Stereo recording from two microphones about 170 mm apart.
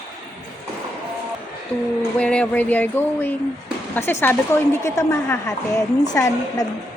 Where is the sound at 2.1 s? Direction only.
5° left (ahead or behind).